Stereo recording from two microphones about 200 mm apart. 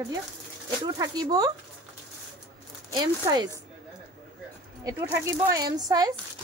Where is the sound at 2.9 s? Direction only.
20° right (ahead or behind).